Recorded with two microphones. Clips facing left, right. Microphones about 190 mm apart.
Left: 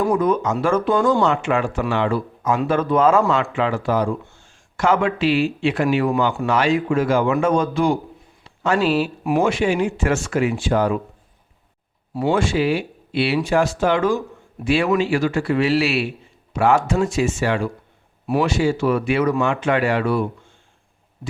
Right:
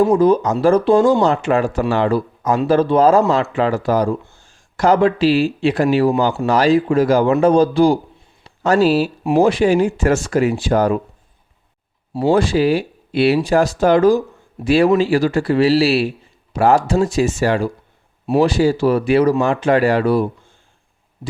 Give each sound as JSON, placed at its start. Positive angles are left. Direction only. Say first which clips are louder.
{"t": 0.0, "sound": "a man's voice", "louder": "right 6 dB", "side_deg": -30}
{"t": 12.1, "sound": "a man's voice", "louder": "right 4 dB", "side_deg": -35}